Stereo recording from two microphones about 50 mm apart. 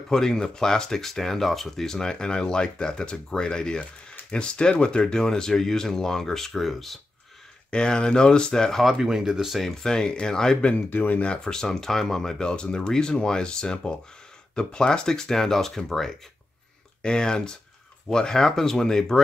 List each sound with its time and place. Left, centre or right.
0.1 s speech: centre
7.7 s speech: centre
8.8 s speech: centre
9.8 s speech: centre
10.9 s speech: left
11.2 s speech: centre